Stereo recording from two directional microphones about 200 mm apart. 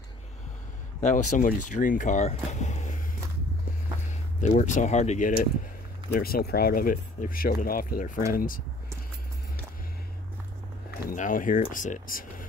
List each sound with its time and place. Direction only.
1.0 s speech: 40° left (ahead or behind)
4.1 s speech: 35° left (ahead or behind)
11.1 s speech: 40° left (ahead or behind)